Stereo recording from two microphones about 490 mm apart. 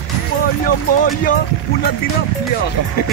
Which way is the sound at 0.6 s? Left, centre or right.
Centre.